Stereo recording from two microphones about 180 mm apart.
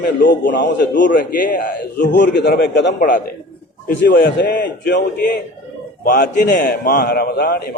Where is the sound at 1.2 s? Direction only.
50° left (ahead or behind); by 2.9 s 70° left (ahead or behind).